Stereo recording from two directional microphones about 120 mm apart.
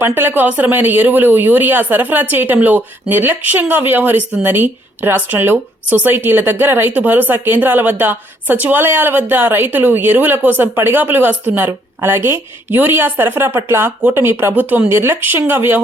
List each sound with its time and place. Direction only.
0.0 s speech: 20° right (ahead or behind)